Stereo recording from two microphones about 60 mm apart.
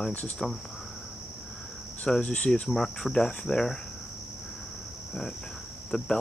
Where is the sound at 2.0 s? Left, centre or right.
Centre.